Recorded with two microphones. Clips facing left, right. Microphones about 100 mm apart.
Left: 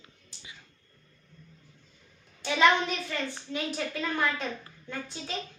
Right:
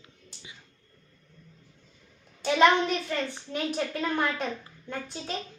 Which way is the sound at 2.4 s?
45° right (ahead or behind).